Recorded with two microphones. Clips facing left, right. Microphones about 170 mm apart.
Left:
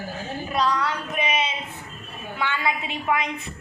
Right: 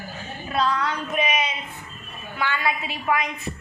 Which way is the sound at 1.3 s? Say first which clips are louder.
Even; 25° left (ahead or behind).